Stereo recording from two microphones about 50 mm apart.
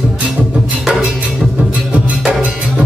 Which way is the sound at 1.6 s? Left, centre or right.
Right.